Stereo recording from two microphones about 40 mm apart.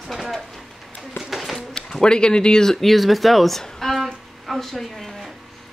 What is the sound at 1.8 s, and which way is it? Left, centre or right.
Speech, centre.